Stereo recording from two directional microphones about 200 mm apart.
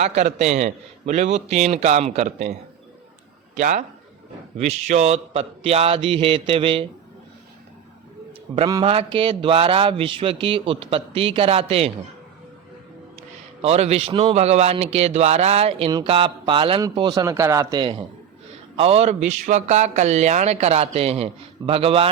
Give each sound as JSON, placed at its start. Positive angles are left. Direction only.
{"t": 0.0, "sound": "a man's voice", "side_deg": -35}
{"t": 8.6, "sound": "a man's voice", "side_deg": -25}
{"t": 13.6, "sound": "a man's voice", "side_deg": -30}